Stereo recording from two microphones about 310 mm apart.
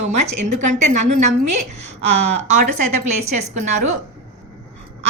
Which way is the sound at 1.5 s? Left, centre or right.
Right.